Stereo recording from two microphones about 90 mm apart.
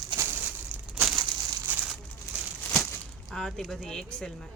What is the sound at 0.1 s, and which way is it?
Crushing, 60° right (ahead or behind).